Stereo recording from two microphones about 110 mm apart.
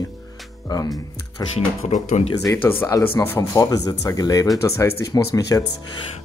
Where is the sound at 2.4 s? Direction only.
25° left (ahead or behind).